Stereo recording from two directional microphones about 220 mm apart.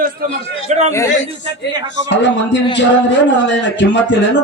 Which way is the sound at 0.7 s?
30° right (ahead or behind).